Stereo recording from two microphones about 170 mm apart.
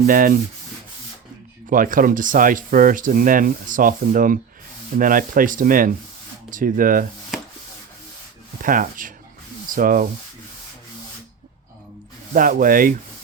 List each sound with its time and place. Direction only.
0.1 s sanding: 55° right (ahead or behind)
1.7 s speech: 55° right (ahead or behind)
8.6 s speech: 55° right (ahead or behind)
12.3 s sanding: 55° right (ahead or behind)